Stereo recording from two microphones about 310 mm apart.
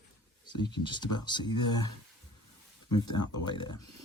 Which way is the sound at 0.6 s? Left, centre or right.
Centre.